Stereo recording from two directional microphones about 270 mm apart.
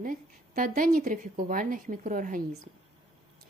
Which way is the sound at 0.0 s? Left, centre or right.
Right.